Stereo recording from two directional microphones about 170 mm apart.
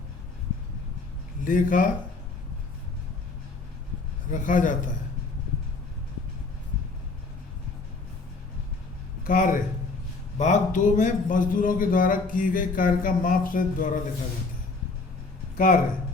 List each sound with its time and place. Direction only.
1.5 s a man's voice: 50° left (ahead or behind)
4.3 s a man's voice: 50° left (ahead or behind)
9.2 s a man's voice: 50° left (ahead or behind)
15.5 s speech: 55° left (ahead or behind)